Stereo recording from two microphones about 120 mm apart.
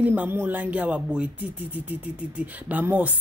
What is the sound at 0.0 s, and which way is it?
Speech, 15° right (ahead or behind).